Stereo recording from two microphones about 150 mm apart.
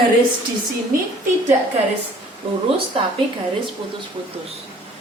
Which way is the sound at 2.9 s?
40° right (ahead or behind).